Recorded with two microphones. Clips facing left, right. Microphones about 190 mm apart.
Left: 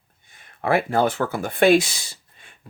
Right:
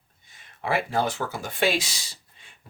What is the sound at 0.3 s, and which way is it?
Speech, 55° left (ahead or behind).